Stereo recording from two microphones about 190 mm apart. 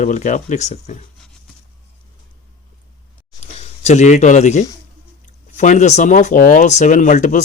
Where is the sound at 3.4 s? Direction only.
35° left (ahead or behind).